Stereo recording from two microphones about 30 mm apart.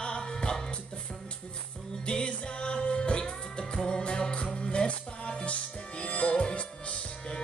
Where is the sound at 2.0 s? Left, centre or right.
Left.